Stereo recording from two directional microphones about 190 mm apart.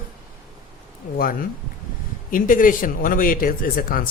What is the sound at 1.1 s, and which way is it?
A man's voice, 50° left (ahead or behind).